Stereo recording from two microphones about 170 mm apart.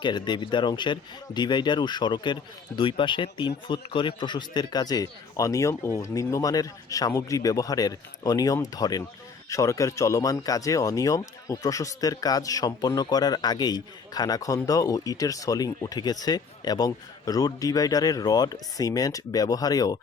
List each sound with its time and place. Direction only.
0.0 s speech: 25° left (ahead or behind)